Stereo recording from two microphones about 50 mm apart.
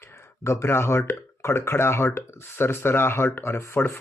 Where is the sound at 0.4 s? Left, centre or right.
Left.